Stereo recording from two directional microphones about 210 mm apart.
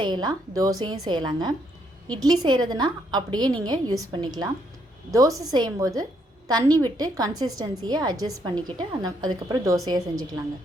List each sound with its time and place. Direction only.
0.0 s a woman's voice: 20° right (ahead or behind)